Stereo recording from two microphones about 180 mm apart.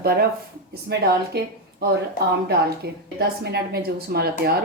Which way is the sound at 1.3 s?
65° right (ahead or behind).